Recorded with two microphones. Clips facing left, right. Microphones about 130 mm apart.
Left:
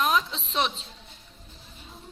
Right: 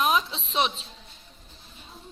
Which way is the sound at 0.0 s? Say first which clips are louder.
Right 1 dB; 10° right (ahead or behind).